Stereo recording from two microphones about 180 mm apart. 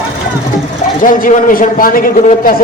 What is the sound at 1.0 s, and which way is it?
A man's voice, 50° left (ahead or behind).